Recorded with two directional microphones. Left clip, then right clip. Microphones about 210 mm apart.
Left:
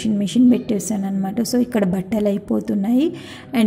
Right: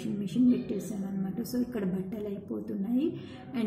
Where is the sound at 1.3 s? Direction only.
35° left (ahead or behind).